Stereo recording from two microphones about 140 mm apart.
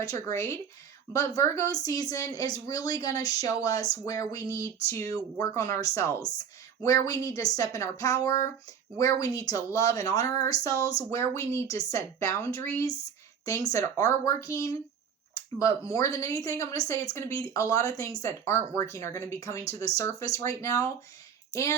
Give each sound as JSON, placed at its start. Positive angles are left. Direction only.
{"t": 0.0, "sound": "speech", "side_deg": 25}
{"t": 10.0, "sound": "speech", "side_deg": -50}
{"t": 10.4, "sound": "speech", "side_deg": 25}